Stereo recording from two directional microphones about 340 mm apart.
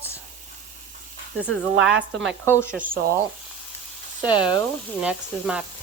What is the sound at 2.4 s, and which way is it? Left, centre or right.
Speech, centre.